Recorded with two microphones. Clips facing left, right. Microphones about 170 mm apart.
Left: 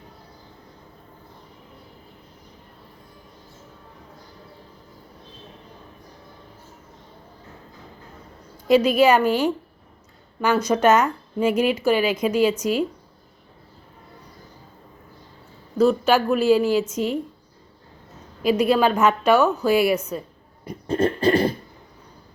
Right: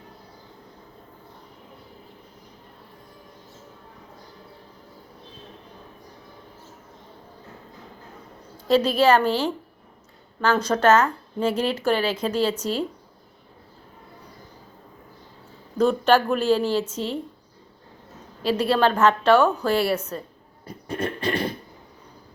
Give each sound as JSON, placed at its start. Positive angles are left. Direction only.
{"t": 8.6, "sound": "speech", "side_deg": 10}
{"t": 15.8, "sound": "speech", "side_deg": 5}
{"t": 18.4, "sound": "speech", "side_deg": 10}
{"t": 20.9, "sound": "a sound", "side_deg": 30}